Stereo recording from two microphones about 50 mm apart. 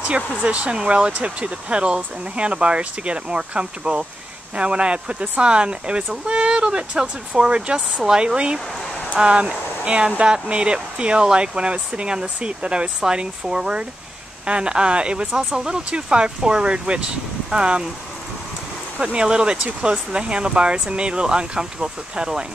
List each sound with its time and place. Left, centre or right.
0.4 s speech: right
18.9 s speech: centre